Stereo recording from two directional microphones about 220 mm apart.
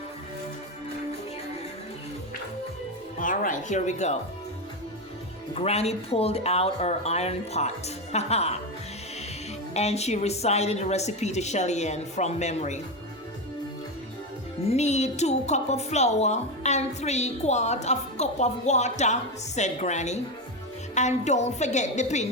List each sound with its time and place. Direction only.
3.2 s a woman's voice: 35° left (ahead or behind)
5.5 s speech: 30° left (ahead or behind)
9.7 s a woman's voice: 30° left (ahead or behind)
14.7 s a woman's voice: 30° left (ahead or behind)